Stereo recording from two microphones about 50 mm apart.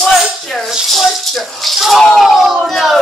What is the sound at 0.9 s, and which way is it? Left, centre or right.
Rattle, centre.